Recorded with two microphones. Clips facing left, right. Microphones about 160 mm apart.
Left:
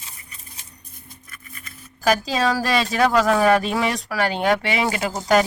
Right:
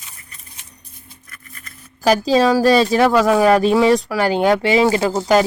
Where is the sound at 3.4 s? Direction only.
35° right (ahead or behind).